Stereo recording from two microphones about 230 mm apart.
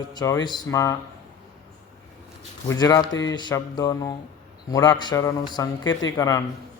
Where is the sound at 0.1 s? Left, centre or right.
Centre.